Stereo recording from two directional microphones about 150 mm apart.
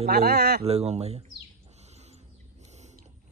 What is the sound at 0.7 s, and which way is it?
Speech, 45° right (ahead or behind).